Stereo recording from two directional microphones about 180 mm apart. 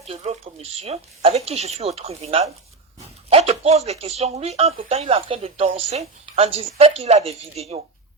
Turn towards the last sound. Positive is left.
turn(degrees=-35)  # may be behind; listen again after turning